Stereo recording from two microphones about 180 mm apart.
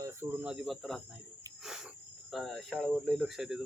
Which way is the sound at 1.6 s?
5° right (ahead or behind).